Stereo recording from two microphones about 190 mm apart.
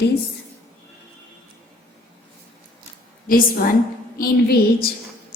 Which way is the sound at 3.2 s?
45° left (ahead or behind).